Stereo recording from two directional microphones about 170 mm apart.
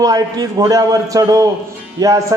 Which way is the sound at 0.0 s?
20° right (ahead or behind).